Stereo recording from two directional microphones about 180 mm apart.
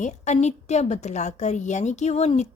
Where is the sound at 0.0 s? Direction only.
40° left (ahead or behind).